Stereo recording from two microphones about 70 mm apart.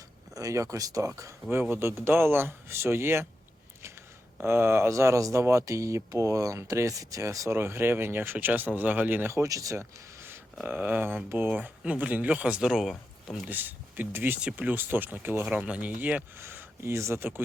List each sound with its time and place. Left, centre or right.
0.3 s speech: right
1.7 s speech: right
4.4 s speech: right
7.5 s speech: right
9.3 s speech: right
10.6 s speech: right; by 12.9 s centre
12.9 s speech: centre
13.5 s speech: right
14.4 s speech: centre
15.4 s speech: centre
16.4 s speech: right